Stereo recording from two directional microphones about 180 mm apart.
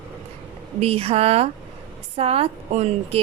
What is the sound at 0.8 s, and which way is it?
A woman's voice, 35° right (ahead or behind).